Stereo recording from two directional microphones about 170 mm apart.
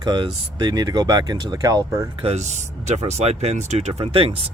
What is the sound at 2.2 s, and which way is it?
Speech, 40° right (ahead or behind).